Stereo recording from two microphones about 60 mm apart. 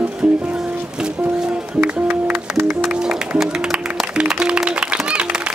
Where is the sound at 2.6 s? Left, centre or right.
Right.